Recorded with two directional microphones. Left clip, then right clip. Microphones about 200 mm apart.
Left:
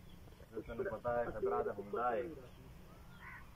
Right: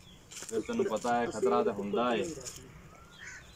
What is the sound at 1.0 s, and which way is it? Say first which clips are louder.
Speech: right 5 dB; 45° right (ahead or behind).